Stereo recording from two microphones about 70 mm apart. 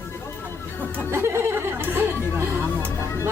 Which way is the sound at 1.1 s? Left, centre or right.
Right.